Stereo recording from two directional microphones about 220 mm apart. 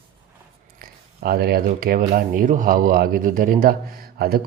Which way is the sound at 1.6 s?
35° right (ahead or behind).